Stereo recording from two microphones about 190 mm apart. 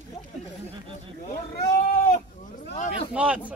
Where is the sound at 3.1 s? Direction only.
5° right (ahead or behind).